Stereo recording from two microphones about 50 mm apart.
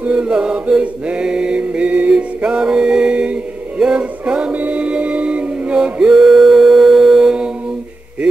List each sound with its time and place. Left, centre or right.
0.0 s mantra: right
4.6 s music: right
6.2 s a sound: centre